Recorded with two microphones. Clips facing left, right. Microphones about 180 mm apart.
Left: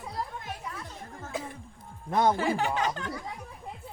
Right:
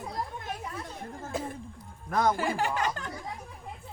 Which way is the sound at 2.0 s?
25° left (ahead or behind).